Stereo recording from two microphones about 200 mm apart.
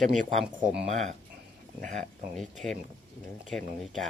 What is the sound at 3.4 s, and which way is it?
Speech, centre (ahead or behind).